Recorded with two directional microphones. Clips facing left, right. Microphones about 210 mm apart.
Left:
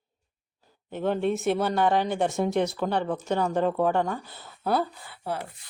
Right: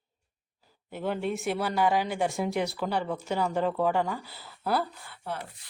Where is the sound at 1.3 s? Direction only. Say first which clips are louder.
Left 5 dB; 25° left (ahead or behind).